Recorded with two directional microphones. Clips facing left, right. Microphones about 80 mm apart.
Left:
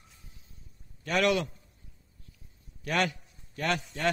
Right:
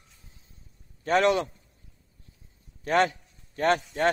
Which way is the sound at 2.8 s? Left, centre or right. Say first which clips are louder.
Right 6 dB; right.